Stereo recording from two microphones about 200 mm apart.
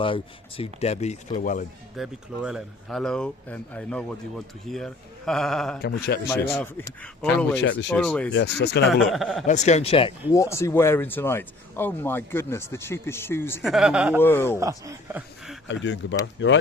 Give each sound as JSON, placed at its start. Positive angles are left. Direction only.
{"t": 0.0, "sound": "a man's voice", "side_deg": 25}
{"t": 2.0, "sound": "speech", "side_deg": 0}
{"t": 7.6, "sound": "speech", "side_deg": 65}
{"t": 7.9, "sound": "speech", "side_deg": 5}
{"t": 8.3, "sound": "speech", "side_deg": 60}
{"t": 9.0, "sound": "speech", "side_deg": 0}
{"t": 9.5, "sound": "a man's voice", "side_deg": 35}
{"t": 10.3, "sound": "speech", "side_deg": 15}
{"t": 13.6, "sound": "speech", "side_deg": 0}
{"t": 14.2, "sound": "speech", "side_deg": 10}
{"t": 14.6, "sound": "speech", "side_deg": -15}
{"t": 15.6, "sound": "speech", "side_deg": 65}